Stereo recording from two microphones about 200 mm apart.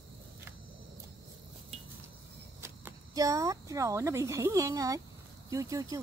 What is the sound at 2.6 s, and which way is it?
Speech, 15° right (ahead or behind).